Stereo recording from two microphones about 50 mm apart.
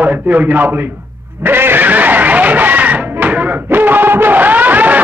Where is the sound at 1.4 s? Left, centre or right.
Right.